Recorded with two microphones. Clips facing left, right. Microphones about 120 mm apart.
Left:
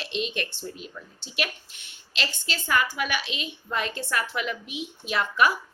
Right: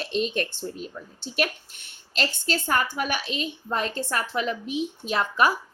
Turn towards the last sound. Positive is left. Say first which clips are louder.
# right 1 dB
turn(degrees=-35)  # may be behind; listen again after turning